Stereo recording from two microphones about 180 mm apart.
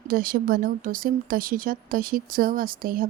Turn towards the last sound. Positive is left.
turn(degrees=-50)  # may be behind; listen again after turning